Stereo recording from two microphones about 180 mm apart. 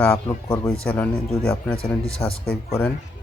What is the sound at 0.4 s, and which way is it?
Speech, 20° left (ahead or behind).